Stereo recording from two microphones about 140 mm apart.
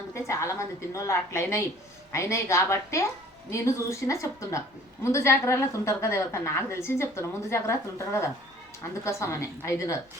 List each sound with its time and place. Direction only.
0.1 s a woman's voice: 20° left (ahead or behind)